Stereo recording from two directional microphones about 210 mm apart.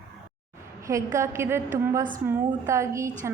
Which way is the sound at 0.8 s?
15° right (ahead or behind).